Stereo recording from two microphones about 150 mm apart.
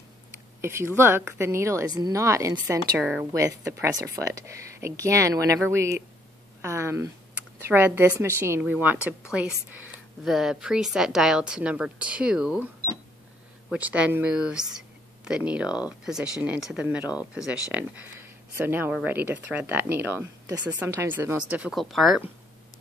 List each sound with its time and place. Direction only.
0.6 s speech: 15° right (ahead or behind)
3.0 s speech: 10° right (ahead or behind)
3.3 s speech: 20° right (ahead or behind); by 12.6 s 5° right (ahead or behind)
13.7 s speech: 10° right (ahead or behind)